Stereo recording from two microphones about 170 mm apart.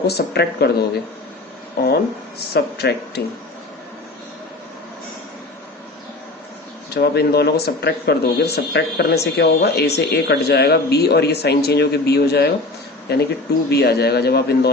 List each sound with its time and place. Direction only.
0.1 s speech: 70° left (ahead or behind)
1.8 s speech: 65° left (ahead or behind)
6.9 s speech: 70° left (ahead or behind)